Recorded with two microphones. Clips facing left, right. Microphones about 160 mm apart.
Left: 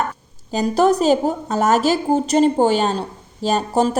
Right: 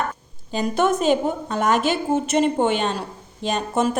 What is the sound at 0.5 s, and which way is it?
A woman's voice, 35° left (ahead or behind).